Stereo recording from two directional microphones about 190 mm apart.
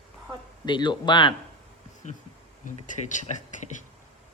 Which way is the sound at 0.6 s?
25° left (ahead or behind).